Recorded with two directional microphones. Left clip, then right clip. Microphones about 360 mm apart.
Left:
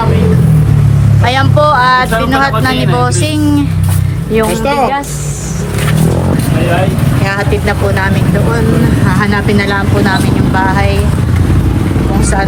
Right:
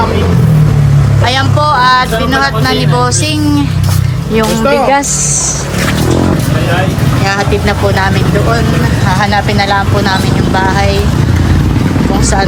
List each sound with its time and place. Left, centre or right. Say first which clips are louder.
1.3 s music: left 2 dB; centre
4.4 s speech: right 1 dB; centre
9.0 s speech: right 6 dB; centre